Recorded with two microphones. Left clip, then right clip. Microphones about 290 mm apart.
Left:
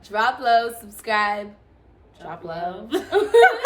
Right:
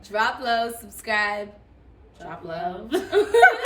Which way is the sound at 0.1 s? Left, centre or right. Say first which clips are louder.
Left 4 dB; centre.